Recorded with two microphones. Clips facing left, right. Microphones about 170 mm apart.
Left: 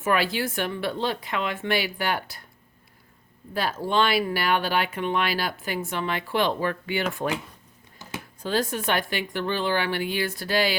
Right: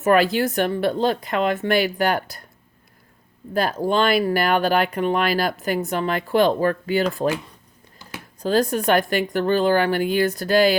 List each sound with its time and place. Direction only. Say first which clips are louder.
0.0 s speech: right 7 dB; 45° right (ahead or behind)
3.8 s speech: right 3 dB; 45° right (ahead or behind)
8.4 s speech: right 7 dB; 45° right (ahead or behind)